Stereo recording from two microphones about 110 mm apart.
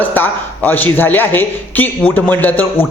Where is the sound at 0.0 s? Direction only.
15° left (ahead or behind).